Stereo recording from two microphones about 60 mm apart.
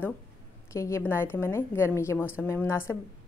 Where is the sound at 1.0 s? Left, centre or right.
Left.